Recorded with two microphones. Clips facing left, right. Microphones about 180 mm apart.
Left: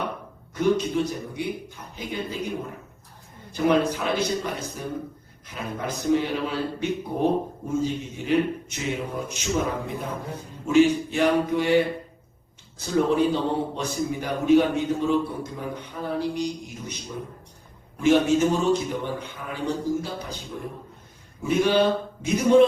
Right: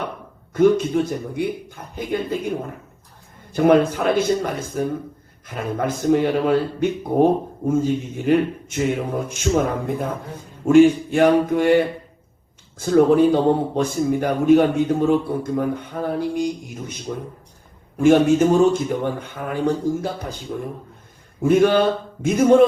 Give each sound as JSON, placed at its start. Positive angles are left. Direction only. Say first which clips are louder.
{"t": 0.5, "sound": "a man's voice", "louder": "right 6 dB", "side_deg": -50}
{"t": 3.5, "sound": "a man's voice", "louder": "right 6 dB", "side_deg": -55}
{"t": 17.9, "sound": "a man's voice", "louder": "right 5 dB", "side_deg": -50}
{"t": 21.4, "sound": "a man's voice", "louder": "right 5 dB", "side_deg": -50}